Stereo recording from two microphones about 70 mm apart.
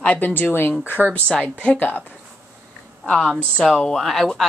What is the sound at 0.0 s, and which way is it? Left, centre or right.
Speech, left.